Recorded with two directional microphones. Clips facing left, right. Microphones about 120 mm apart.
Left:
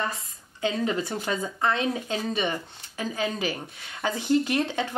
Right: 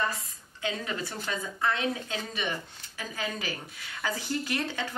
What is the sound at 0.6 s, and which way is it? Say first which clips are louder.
Speech: left 7 dB; 30° left (ahead or behind).